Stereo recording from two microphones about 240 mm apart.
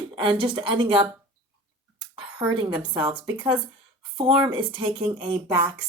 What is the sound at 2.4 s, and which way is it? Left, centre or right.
Speech, centre.